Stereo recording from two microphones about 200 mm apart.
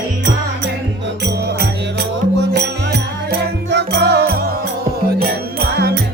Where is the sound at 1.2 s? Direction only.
55° right (ahead or behind).